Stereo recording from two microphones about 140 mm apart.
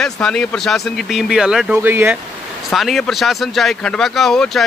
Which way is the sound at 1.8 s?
15° right (ahead or behind).